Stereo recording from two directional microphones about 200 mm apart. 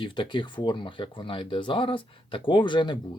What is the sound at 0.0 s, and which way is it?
Speech, 25° left (ahead or behind).